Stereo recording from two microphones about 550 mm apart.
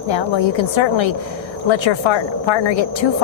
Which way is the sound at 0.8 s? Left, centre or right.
Left.